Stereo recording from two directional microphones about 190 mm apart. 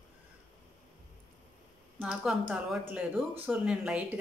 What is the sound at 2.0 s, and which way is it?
A woman's voice, 5° right (ahead or behind).